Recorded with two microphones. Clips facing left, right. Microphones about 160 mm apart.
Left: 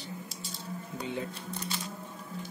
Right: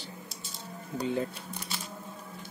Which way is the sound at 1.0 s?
40° right (ahead or behind).